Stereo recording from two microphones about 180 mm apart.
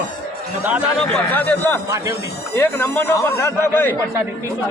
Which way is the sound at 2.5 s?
15° left (ahead or behind).